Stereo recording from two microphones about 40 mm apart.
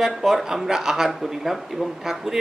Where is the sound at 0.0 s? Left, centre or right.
Centre.